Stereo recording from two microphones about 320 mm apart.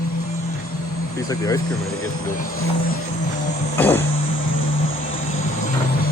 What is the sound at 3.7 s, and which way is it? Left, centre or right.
Vehicle, centre.